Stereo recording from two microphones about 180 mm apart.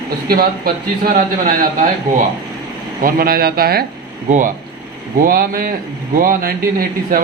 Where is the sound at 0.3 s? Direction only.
55° right (ahead or behind).